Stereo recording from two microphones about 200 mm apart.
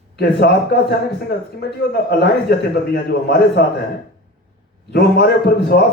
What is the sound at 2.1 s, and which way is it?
Speech, 50° left (ahead or behind).